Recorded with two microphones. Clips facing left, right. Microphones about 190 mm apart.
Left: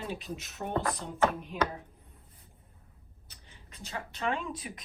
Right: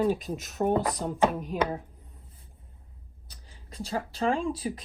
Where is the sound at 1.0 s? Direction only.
45° right (ahead or behind).